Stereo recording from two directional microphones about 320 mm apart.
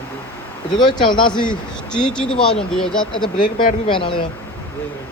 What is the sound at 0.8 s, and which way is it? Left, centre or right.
Speech, centre.